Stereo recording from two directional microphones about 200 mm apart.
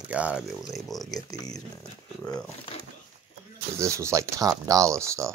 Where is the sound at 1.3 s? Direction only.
20° left (ahead or behind).